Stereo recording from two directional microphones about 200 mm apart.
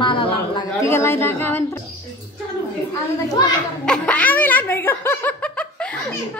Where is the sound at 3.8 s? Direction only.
5° left (ahead or behind).